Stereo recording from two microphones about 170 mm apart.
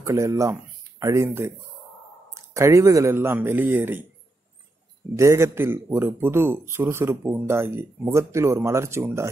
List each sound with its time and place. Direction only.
0.0 s speech: 15° right (ahead or behind)
5.1 s speech: 15° right (ahead or behind)